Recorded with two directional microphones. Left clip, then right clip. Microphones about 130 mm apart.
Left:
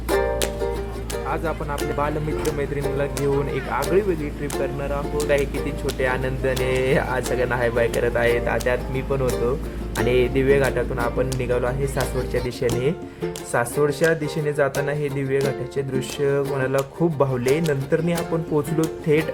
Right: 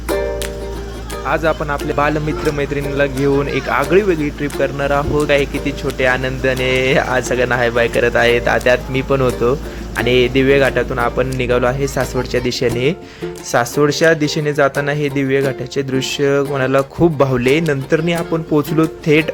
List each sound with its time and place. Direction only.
1.3 s speech: 35° right (ahead or behind)
3.9 s speech: 35° right (ahead or behind)
5.3 s speech: 25° right (ahead or behind)
10.0 s speech: 25° right (ahead or behind)